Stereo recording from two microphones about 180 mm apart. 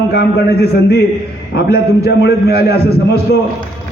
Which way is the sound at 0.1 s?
65° left (ahead or behind).